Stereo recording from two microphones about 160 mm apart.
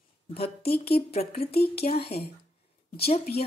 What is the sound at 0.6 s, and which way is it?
Speech, 75° left (ahead or behind).